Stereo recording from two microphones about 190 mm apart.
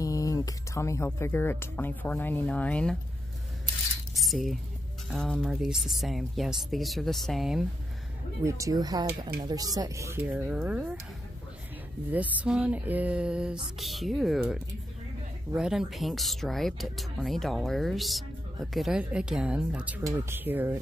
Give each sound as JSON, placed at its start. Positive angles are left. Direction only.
{"t": 0.0, "sound": "speech", "side_deg": 20}
{"t": 4.2, "sound": "a sound", "side_deg": 0}
{"t": 5.1, "sound": "speech", "side_deg": 5}
{"t": 8.5, "sound": "speech", "side_deg": -15}
{"t": 12.1, "sound": "speech", "side_deg": -10}